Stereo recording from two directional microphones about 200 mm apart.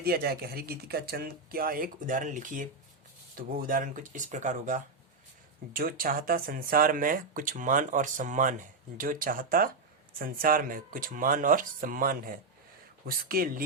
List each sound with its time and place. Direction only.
0.0 s speech: 50° right (ahead or behind)